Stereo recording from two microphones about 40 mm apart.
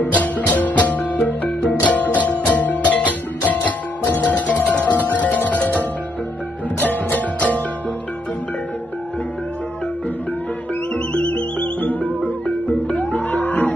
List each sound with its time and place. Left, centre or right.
0.0 s music: left
11.1 s music: left